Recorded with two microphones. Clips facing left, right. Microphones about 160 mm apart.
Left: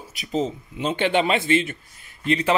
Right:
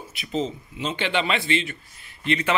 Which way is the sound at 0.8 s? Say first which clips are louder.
Left 5 dB; 50° left (ahead or behind).